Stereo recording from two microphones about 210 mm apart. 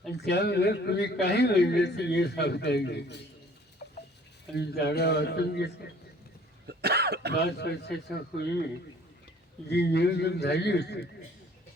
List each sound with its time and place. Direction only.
0.1 s a man's voice: 50° left (ahead or behind)
4.5 s a man's voice: 50° left (ahead or behind)
6.7 s cough: 50° right (ahead or behind)
7.3 s a man's voice: 50° left (ahead or behind)
9.6 s a man's voice: 50° left (ahead or behind)